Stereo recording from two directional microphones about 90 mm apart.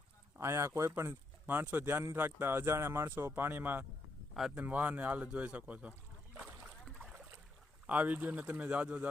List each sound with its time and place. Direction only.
0.3 s speech: 30° right (ahead or behind)
7.9 s speech: 20° right (ahead or behind)